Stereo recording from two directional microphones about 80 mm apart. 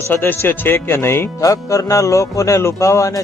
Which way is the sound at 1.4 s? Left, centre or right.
Left.